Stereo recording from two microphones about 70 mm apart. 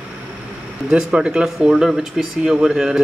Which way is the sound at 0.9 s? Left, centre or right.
Centre.